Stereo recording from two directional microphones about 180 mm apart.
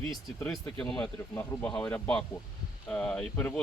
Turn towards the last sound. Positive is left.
turn(degrees=10)  # may be behind; listen again after turning